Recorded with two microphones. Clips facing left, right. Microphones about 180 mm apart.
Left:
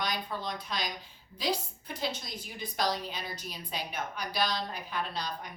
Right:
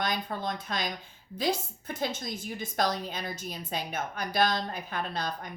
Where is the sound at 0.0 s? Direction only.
50° right (ahead or behind).